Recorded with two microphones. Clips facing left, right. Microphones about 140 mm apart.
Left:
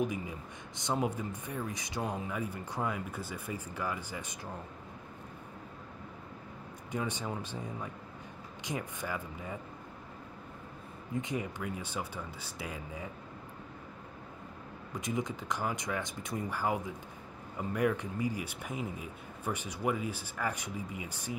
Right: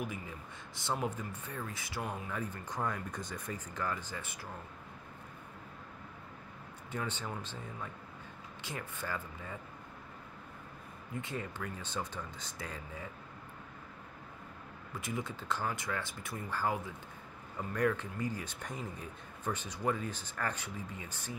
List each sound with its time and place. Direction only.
0.0 s speech: 20° left (ahead or behind)
6.9 s speech: 15° left (ahead or behind)
11.1 s speech: 15° left (ahead or behind)
14.9 s speech: 20° left (ahead or behind)